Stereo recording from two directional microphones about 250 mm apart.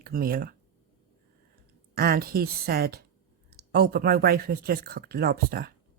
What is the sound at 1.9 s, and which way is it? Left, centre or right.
Speech, right.